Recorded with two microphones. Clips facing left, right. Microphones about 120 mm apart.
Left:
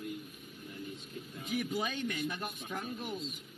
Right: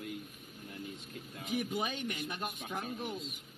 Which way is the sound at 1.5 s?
20° right (ahead or behind).